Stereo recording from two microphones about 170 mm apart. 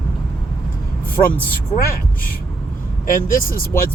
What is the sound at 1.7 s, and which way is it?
Speech, 60° left (ahead or behind).